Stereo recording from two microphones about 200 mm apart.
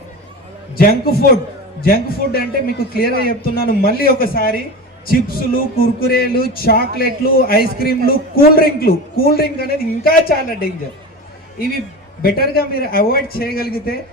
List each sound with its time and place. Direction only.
0.8 s a man's voice: 50° left (ahead or behind)
12.2 s a man's voice: 50° left (ahead or behind)